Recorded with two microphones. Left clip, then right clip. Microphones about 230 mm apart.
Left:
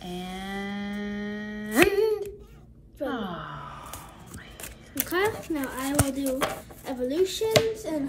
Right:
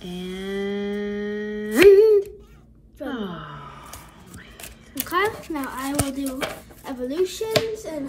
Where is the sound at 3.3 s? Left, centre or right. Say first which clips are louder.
Even; right.